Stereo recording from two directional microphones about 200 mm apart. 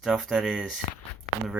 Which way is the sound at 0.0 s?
Centre (ahead or behind).